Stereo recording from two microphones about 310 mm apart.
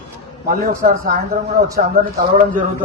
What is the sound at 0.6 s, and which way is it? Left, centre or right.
Speech, right.